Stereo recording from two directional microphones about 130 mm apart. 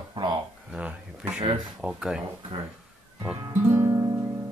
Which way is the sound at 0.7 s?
10° right (ahead or behind).